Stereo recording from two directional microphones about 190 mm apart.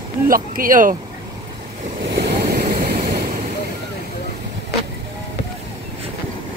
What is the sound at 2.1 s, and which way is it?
Vehicle, 60° right (ahead or behind).